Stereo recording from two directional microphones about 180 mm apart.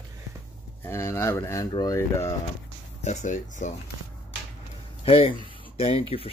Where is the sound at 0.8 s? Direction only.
15° left (ahead or behind).